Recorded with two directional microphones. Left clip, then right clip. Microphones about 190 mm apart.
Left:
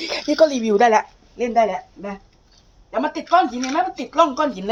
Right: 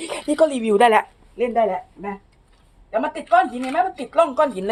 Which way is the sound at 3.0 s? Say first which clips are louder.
Left 1 dB; 35° right (ahead or behind).